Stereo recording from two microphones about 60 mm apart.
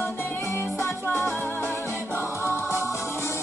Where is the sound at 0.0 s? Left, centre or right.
Left.